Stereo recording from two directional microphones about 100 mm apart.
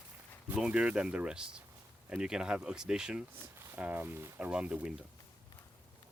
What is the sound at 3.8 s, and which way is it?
Speech, 20° right (ahead or behind).